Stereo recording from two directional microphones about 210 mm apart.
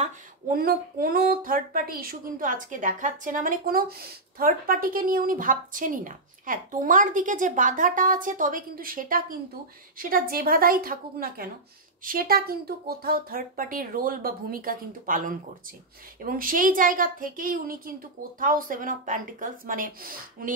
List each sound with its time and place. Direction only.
0.5 s speech: 45° right (ahead or behind)